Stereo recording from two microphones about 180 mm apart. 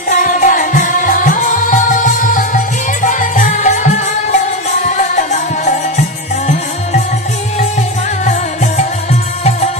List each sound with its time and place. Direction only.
0.1 s music: 45° left (ahead or behind)
8.3 s music: 40° left (ahead or behind)